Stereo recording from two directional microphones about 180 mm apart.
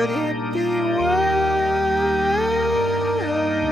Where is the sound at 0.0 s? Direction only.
Centre (ahead or behind).